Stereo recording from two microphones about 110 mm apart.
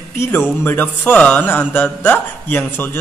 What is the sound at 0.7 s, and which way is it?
A man's voice, 15° left (ahead or behind).